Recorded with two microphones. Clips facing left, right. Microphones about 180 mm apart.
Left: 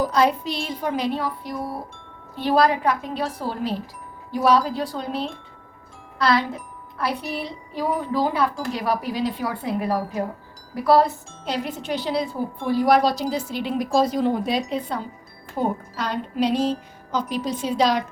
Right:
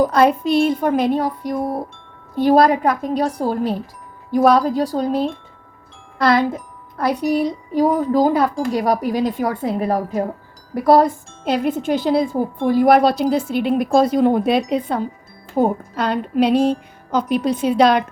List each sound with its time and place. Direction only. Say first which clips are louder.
0.0 s speech: right 5 dB; 55° right (ahead or behind)